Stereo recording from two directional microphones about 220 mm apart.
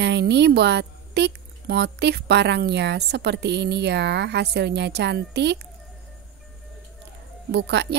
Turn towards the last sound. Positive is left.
turn(degrees=-50)  # may be behind; listen again after turning